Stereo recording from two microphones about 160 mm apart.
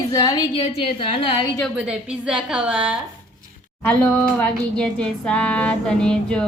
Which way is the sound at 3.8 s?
5° left (ahead or behind).